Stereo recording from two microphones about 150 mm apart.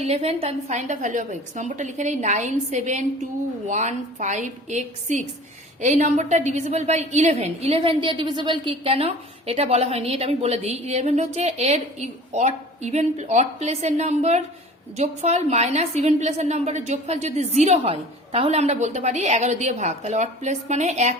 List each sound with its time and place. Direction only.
0.0 s a woman's voice: 45° right (ahead or behind)